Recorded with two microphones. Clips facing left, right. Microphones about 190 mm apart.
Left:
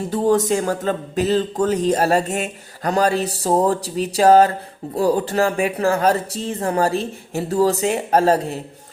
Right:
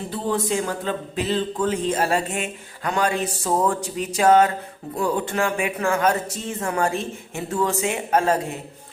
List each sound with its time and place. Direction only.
0.1 s speech: 45° left (ahead or behind)